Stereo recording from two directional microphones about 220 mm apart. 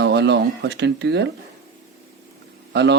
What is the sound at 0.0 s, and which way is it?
Speech, 50° right (ahead or behind).